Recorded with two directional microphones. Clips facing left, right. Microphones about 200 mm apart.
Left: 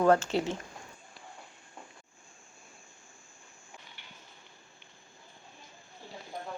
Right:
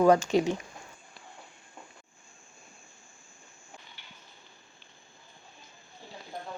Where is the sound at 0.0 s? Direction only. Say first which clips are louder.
Right 3 dB; 15° right (ahead or behind).